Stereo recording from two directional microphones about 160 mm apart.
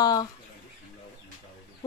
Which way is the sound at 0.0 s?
25° left (ahead or behind).